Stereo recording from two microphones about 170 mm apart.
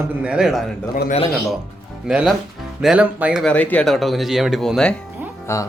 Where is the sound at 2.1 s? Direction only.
5° right (ahead or behind).